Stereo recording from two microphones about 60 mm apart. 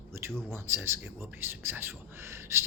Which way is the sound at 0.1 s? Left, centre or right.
Right.